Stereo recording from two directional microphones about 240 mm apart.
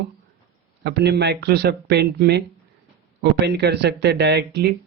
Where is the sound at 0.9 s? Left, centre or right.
Right.